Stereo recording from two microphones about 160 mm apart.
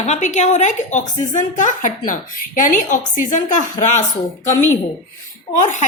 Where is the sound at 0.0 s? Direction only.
45° left (ahead or behind).